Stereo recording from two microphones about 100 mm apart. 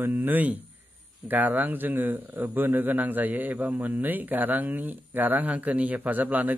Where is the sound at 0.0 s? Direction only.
20° right (ahead or behind).